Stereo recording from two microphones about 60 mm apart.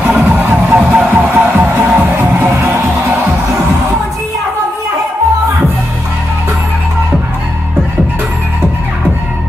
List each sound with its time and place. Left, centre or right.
0.0 s music: right